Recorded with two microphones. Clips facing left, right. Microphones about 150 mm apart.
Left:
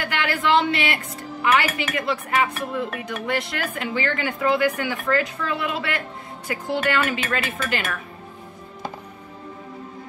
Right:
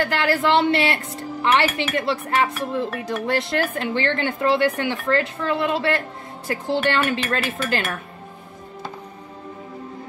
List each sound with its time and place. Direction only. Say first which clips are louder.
0.0 s a woman's voice: right 4 dB; 35° right (ahead or behind)